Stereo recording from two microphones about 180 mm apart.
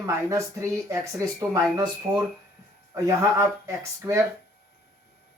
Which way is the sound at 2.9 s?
15° right (ahead or behind).